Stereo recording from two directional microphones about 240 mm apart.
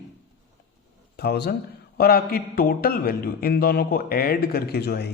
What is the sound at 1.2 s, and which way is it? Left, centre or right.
A man's voice, left.